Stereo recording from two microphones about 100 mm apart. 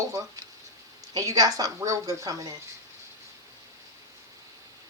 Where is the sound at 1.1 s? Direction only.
35° right (ahead or behind).